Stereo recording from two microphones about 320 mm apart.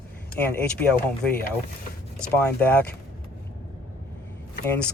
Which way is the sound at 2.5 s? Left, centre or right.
Centre.